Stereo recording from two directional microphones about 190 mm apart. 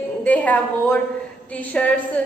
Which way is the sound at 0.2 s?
10° left (ahead or behind).